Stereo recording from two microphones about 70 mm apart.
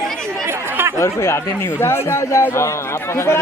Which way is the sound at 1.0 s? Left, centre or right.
Left.